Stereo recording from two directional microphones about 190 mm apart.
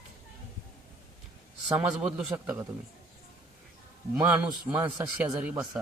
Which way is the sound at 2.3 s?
15° right (ahead or behind).